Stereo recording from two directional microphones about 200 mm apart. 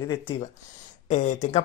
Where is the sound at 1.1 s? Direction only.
35° left (ahead or behind).